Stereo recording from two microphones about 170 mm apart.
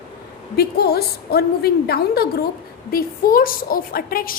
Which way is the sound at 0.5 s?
65° left (ahead or behind).